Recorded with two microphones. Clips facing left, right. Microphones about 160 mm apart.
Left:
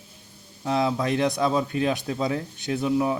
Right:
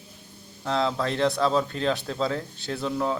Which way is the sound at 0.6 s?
15° left (ahead or behind).